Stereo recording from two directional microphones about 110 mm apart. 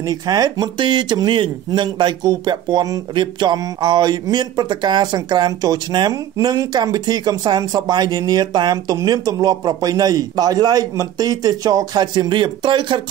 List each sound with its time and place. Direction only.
0.0 s speech: 35° right (ahead or behind)